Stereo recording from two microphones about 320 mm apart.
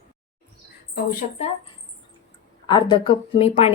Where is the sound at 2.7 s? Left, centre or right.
Centre.